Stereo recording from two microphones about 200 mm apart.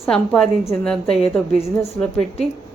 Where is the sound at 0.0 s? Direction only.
5° left (ahead or behind).